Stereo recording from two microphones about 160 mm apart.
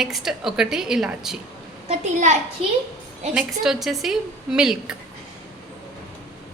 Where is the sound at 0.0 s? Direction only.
Centre (ahead or behind).